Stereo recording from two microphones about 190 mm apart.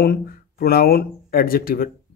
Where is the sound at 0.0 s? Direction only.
55° left (ahead or behind).